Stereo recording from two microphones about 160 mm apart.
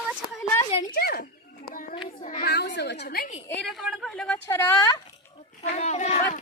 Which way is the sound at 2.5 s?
90° left.